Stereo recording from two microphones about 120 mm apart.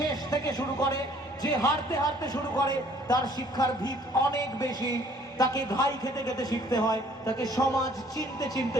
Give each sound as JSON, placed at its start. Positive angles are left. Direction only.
{"t": 0.3, "sound": "a man's voice", "side_deg": 30}